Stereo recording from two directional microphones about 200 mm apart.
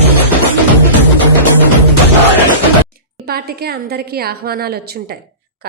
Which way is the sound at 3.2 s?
50° right (ahead or behind).